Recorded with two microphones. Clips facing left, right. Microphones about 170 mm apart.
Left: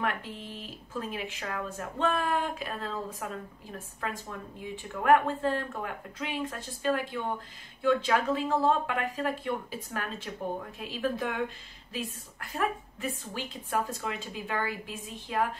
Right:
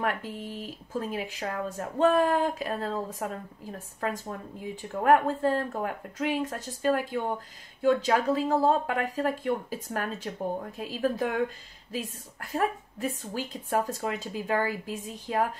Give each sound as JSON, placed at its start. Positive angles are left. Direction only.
{"t": 0.0, "sound": "speech", "side_deg": -45}